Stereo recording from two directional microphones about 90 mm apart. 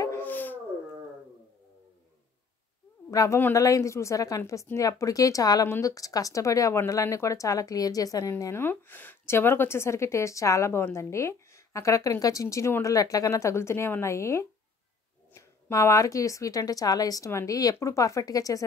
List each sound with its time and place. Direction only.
0.2 s dog: 20° left (ahead or behind)
3.1 s a woman's voice: 35° left (ahead or behind)